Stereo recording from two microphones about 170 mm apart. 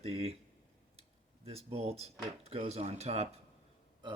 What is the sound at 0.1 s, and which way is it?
Speech, 35° right (ahead or behind).